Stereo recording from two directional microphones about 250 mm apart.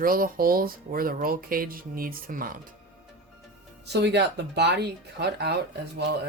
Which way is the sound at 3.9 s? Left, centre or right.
Right.